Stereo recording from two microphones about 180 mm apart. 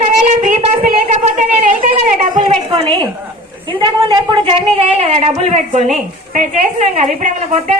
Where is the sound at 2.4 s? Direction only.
25° right (ahead or behind).